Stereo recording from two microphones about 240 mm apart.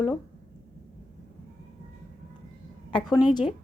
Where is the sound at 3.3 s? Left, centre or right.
Centre.